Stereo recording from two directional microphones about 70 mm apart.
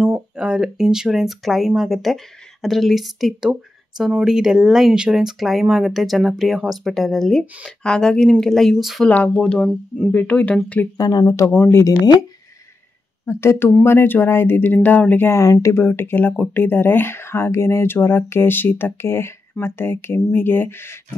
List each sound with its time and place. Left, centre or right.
0.4 s speech: centre
9.1 s speech: centre
11.0 s speech: left
11.2 s speech: left
13.2 s speech: left
15.3 s speech: left